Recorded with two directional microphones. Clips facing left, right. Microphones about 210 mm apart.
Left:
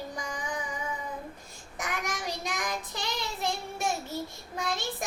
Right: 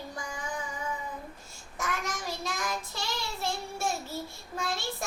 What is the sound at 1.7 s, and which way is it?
Child singing, 15° left (ahead or behind).